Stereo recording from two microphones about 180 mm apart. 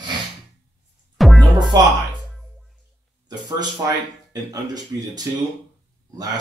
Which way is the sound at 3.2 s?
20° right (ahead or behind).